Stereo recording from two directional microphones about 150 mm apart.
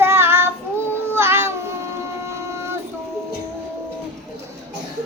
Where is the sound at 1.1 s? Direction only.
15° right (ahead or behind).